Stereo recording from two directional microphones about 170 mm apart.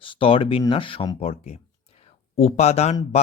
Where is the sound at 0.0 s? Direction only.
30° left (ahead or behind).